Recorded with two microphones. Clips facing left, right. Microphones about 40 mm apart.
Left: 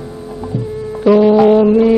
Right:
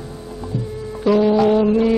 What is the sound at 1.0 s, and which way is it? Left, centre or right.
Music, centre.